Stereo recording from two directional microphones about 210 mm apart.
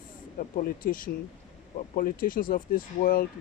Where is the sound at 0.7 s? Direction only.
40° left (ahead or behind).